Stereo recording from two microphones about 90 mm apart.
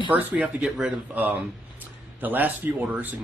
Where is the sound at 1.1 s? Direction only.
20° right (ahead or behind).